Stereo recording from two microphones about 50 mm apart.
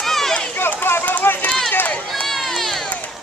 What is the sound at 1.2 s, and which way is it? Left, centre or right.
Run, left.